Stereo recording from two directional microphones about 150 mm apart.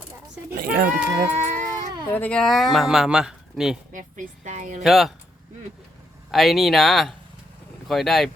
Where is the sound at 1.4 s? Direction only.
50° right (ahead or behind).